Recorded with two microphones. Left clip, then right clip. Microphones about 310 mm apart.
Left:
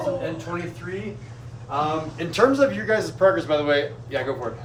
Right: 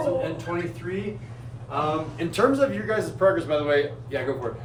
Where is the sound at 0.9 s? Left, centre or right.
Centre.